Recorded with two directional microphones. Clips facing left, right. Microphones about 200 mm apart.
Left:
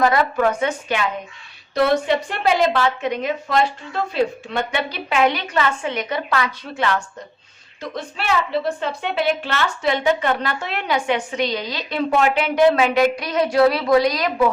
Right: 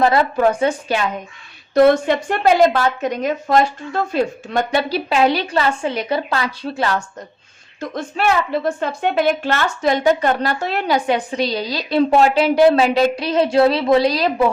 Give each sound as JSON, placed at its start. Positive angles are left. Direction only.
{"t": 0.0, "sound": "a woman's voice", "side_deg": -30}
{"t": 1.7, "sound": "a woman's voice", "side_deg": -50}
{"t": 7.8, "sound": "a woman's voice", "side_deg": -45}